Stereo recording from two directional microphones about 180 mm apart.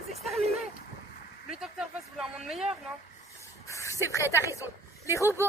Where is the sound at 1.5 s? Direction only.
5° right (ahead or behind).